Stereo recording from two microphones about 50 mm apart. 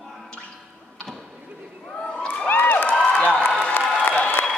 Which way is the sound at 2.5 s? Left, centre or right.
Left.